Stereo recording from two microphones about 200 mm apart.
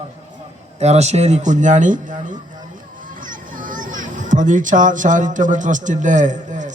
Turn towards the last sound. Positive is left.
turn(degrees=-40)  # may be behind; listen again after turning